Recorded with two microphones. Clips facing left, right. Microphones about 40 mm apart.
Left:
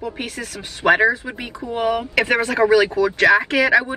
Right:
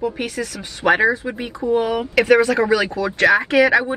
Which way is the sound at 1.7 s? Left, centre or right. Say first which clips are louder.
Even; left.